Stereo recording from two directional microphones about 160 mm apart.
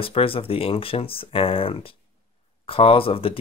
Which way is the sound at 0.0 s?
35° left (ahead or behind).